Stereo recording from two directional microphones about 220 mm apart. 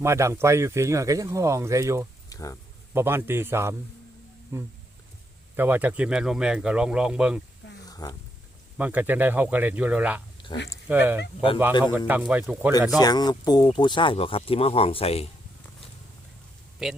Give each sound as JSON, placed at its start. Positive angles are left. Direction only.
{"t": 0.0, "sound": "speech", "side_deg": -10}
{"t": 2.3, "sound": "speech", "side_deg": 15}
{"t": 2.9, "sound": "speech", "side_deg": -10}
{"t": 7.9, "sound": "a sound", "side_deg": 15}
{"t": 8.8, "sound": "speech", "side_deg": -10}
{"t": 13.0, "sound": "speech", "side_deg": 20}
{"t": 16.8, "sound": "speech", "side_deg": 0}